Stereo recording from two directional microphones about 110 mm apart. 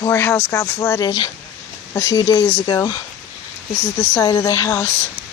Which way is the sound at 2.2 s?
35° left (ahead or behind).